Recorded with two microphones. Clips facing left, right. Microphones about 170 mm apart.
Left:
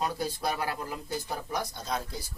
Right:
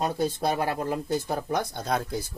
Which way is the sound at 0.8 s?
60° right (ahead or behind).